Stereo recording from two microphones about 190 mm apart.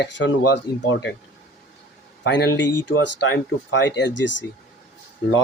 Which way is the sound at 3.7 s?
65° left (ahead or behind).